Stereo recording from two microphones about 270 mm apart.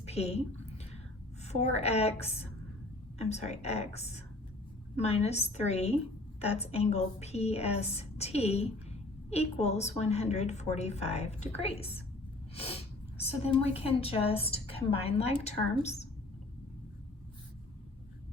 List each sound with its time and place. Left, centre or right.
0.0 s a woman's voice: left